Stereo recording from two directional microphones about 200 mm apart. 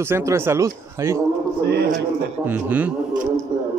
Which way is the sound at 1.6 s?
55° right (ahead or behind).